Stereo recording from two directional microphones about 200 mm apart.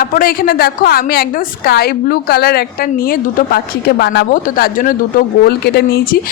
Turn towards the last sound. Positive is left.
turn(degrees=50)  # may be behind; listen again after turning